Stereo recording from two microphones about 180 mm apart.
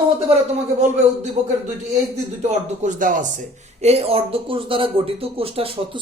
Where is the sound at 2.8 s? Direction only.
45° right (ahead or behind).